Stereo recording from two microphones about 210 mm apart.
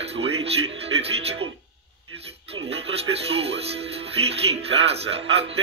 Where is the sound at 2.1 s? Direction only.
30° right (ahead or behind).